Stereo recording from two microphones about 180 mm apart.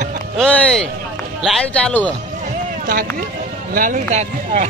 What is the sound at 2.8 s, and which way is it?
Speech, 50° right (ahead or behind).